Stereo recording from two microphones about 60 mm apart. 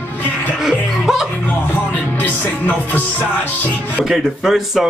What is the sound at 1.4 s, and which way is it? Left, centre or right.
Music, left.